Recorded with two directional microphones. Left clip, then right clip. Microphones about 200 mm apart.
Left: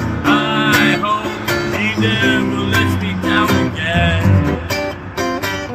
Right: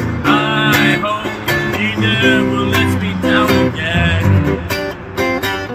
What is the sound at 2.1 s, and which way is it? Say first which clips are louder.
Music: right 4 dB; centre (ahead or behind).